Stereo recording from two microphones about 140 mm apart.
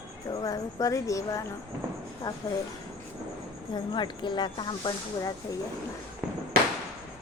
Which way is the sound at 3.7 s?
35° left (ahead or behind).